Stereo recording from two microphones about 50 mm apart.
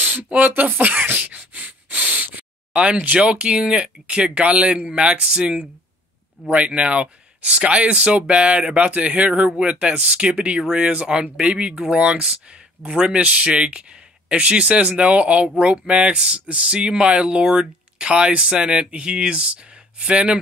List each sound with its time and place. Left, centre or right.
0.0 s speech: right